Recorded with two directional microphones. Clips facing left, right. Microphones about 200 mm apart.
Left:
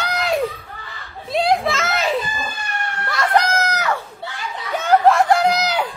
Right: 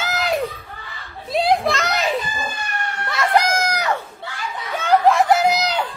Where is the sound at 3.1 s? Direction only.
5° right (ahead or behind).